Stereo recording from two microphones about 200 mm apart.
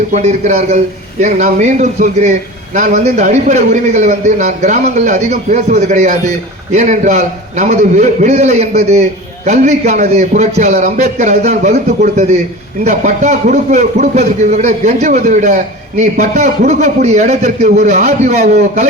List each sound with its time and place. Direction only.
0.1 s a man's voice: 35° right (ahead or behind)